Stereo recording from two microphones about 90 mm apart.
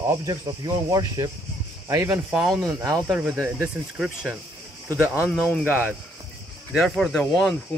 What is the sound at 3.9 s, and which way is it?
Speech, 10° right (ahead or behind).